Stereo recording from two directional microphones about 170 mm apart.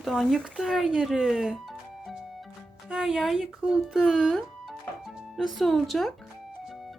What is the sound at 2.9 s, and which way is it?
Speech, centre (ahead or behind).